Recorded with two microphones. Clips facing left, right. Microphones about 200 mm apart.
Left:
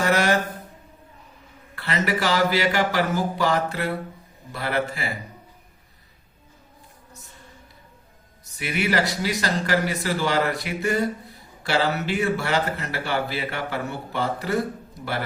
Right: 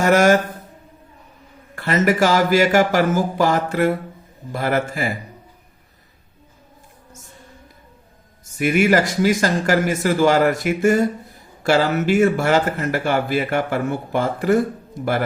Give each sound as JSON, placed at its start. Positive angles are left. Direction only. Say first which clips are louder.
{"t": 0.0, "sound": "a sound", "louder": "right 7 dB", "side_deg": -45}
{"t": 1.7, "sound": "a man's voice", "louder": "right 7 dB", "side_deg": -45}
{"t": 8.5, "sound": "a man's voice", "louder": "right 8 dB", "side_deg": -45}